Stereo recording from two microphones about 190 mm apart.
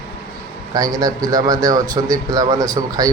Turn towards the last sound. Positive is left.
turn(degrees=-20)  # may be behind; listen again after turning